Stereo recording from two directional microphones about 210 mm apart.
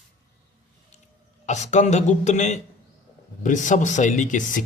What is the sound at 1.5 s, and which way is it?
Speech, 35° left (ahead or behind).